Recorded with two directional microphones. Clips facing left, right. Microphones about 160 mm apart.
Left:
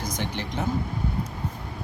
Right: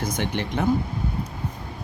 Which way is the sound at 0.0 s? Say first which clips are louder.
Right 4 dB; 60° right (ahead or behind).